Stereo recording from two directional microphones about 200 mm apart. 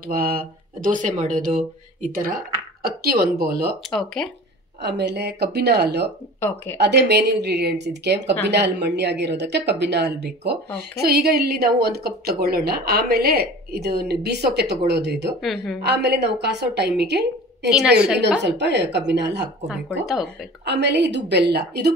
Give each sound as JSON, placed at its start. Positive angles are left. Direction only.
{"t": 0.0, "sound": "speech", "side_deg": -45}
{"t": 3.9, "sound": "a woman's voice", "side_deg": 5}
{"t": 4.8, "sound": "speech", "side_deg": -55}
{"t": 6.4, "sound": "speech", "side_deg": 10}
{"t": 6.8, "sound": "speech", "side_deg": -55}
{"t": 15.4, "sound": "a woman's voice", "side_deg": 0}
{"t": 15.8, "sound": "speech", "side_deg": -55}
{"t": 17.6, "sound": "a woman's voice", "side_deg": -5}
{"t": 18.4, "sound": "speech", "side_deg": -60}
{"t": 20.1, "sound": "a woman's voice", "side_deg": 0}
{"t": 20.6, "sound": "speech", "side_deg": -60}